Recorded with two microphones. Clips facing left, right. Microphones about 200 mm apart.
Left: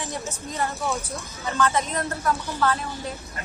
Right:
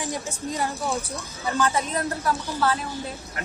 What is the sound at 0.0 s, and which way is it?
A woman's voice, 15° right (ahead or behind).